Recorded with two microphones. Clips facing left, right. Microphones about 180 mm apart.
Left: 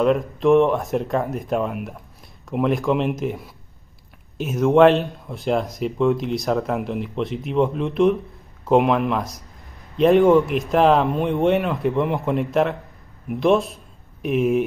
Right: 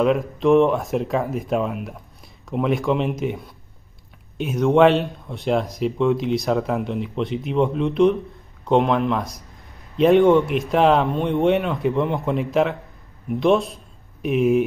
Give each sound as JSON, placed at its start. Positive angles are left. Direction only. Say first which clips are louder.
{"t": 0.0, "sound": "speech", "louder": "even", "side_deg": 0}